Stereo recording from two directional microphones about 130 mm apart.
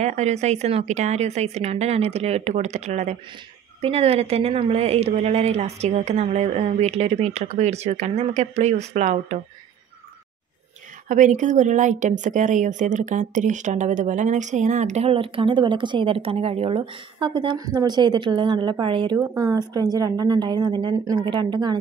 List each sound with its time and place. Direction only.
0.0 s a woman's voice: 60° right (ahead or behind)
3.8 s a woman's voice: 50° right (ahead or behind)
11.1 s a woman's voice: 85° right; by 19.1 s 35° right (ahead or behind)
19.1 s speech: 25° right (ahead or behind)